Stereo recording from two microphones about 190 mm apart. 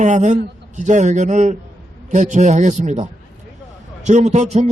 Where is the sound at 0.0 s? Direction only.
40° right (ahead or behind).